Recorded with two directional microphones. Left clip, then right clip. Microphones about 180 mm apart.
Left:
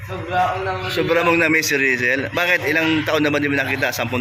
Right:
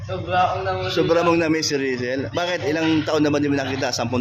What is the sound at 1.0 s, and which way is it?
A man's voice, 30° right (ahead or behind).